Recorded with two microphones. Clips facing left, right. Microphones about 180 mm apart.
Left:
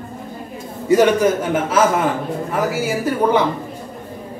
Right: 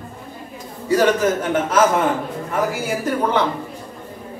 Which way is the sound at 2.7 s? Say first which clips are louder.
Left 2 dB; 5° left (ahead or behind).